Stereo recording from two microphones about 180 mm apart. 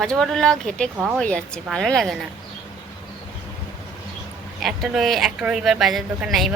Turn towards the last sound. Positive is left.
turn(degrees=0)  # may be behind; listen again after turning